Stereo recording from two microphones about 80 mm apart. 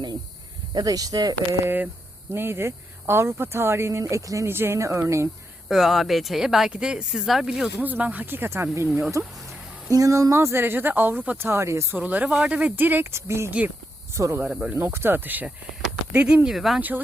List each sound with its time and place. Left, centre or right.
0.7 s speech: right
1.6 s speech: right
4.4 s speech: right
5.6 s speech: centre
7.8 s speech: right
11.9 s speech: centre